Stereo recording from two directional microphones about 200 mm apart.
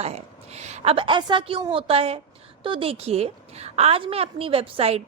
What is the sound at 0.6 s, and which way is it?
A woman's voice, 30° right (ahead or behind).